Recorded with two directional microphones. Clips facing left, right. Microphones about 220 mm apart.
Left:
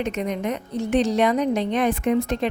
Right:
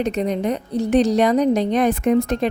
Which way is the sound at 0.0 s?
35° right (ahead or behind).